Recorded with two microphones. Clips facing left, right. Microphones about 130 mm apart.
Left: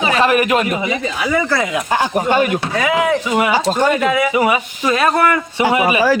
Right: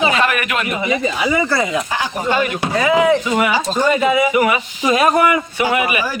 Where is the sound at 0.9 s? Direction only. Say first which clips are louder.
Right 1 dB; centre (ahead or behind).